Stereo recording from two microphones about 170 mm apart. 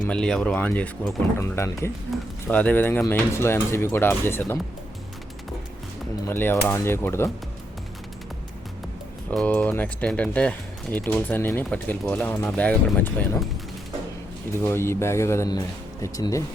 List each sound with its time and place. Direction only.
0.1 s speech: 5° left (ahead or behind)
6.2 s speech: 15° left (ahead or behind)
9.3 s speech: 5° left (ahead or behind)
14.6 s speech: 15° left (ahead or behind)